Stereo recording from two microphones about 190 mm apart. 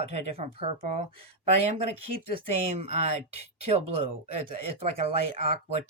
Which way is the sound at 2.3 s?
30° right (ahead or behind).